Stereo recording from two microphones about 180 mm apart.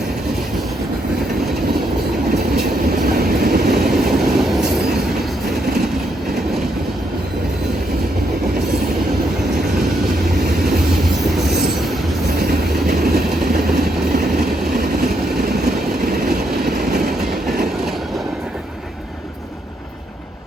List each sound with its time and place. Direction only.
3.1 s train: 60° right (ahead or behind)
4.2 s train: centre (ahead or behind)
12.4 s train: 60° right (ahead or behind)
14.8 s train: 60° right (ahead or behind)